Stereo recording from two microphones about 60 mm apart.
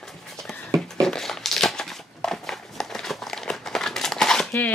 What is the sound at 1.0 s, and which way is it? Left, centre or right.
Crumpling, centre.